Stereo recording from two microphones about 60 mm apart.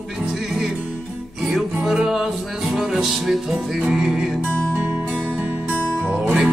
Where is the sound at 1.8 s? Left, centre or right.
Centre.